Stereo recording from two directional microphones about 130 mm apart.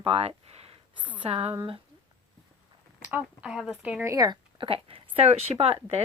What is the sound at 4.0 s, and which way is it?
Speech, 25° right (ahead or behind).